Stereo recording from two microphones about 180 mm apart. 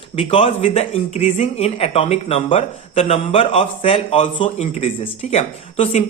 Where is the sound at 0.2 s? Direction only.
30° left (ahead or behind).